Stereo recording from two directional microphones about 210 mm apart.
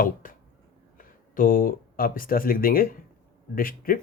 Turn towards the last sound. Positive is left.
turn(degrees=40)  # may be behind; listen again after turning